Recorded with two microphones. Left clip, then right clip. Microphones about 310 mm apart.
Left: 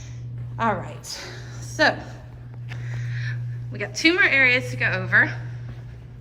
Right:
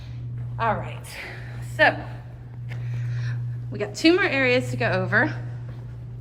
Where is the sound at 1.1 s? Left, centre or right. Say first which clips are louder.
Left 1 dB; centre.